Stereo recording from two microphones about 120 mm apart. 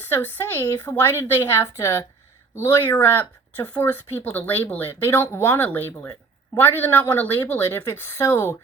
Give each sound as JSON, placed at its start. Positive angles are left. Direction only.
{"t": 0.1, "sound": "a woman's voice", "side_deg": 20}